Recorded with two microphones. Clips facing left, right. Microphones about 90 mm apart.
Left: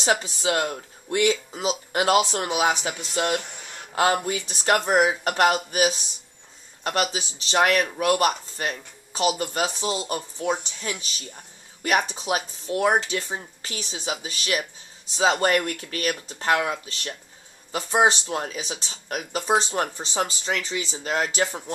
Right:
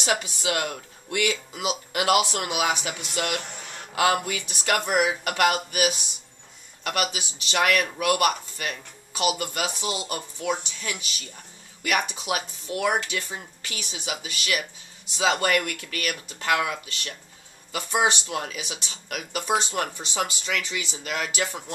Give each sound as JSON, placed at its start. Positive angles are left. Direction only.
{"t": 0.0, "sound": "speech", "side_deg": 30}
{"t": 3.4, "sound": "a sound", "side_deg": 5}
{"t": 3.9, "sound": "speech", "side_deg": 30}